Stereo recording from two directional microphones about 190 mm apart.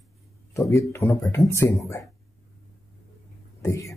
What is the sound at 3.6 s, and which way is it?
Speech, 15° left (ahead or behind).